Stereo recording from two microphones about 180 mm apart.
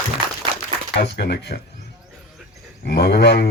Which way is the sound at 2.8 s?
65° left (ahead or behind).